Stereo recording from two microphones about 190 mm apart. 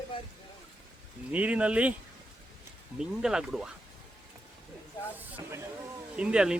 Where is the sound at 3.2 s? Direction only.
5° right (ahead or behind).